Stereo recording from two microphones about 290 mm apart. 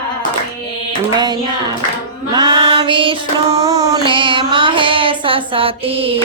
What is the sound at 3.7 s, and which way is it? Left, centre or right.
Child singing, centre.